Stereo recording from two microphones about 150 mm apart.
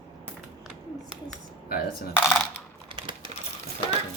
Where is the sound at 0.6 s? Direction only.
5° right (ahead or behind).